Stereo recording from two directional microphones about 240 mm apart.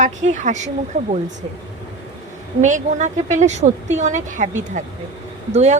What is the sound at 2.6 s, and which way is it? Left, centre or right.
A woman's voice, right.